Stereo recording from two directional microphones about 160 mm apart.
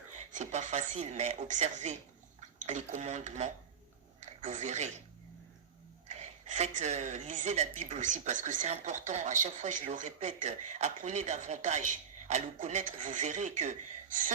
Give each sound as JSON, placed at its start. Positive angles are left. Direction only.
{"t": 0.1, "sound": "a woman's voice", "side_deg": -45}
{"t": 6.1, "sound": "a woman's voice", "side_deg": -45}